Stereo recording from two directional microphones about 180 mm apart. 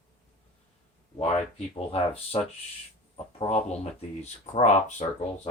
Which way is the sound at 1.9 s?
30° left (ahead or behind).